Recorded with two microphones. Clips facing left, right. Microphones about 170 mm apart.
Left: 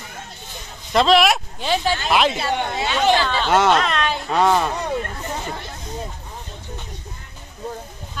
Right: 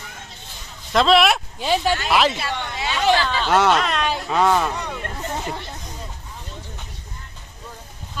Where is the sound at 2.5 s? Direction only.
45° left (ahead or behind).